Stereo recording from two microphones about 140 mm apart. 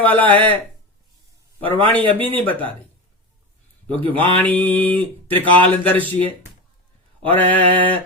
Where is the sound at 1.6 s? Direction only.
40° right (ahead or behind).